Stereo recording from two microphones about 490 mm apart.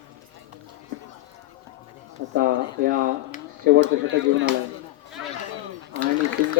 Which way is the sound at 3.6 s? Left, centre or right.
Right.